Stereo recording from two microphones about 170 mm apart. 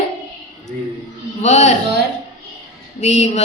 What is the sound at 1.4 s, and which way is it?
Speech, 40° left (ahead or behind).